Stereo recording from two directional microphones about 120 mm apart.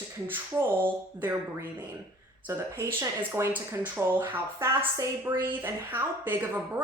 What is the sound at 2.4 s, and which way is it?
Speech, 20° right (ahead or behind).